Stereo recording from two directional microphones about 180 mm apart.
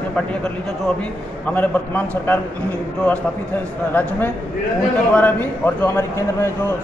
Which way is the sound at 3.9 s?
10° left (ahead or behind).